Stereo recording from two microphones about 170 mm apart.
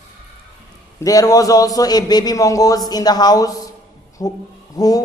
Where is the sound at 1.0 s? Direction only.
20° left (ahead or behind).